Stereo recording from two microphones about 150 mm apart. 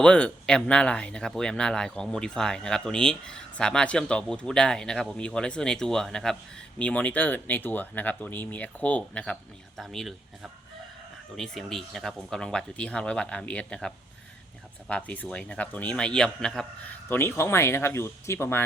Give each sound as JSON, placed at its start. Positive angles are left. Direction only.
{"t": 0.0, "sound": "speech", "side_deg": 5}
{"t": 17.1, "sound": "speech", "side_deg": 15}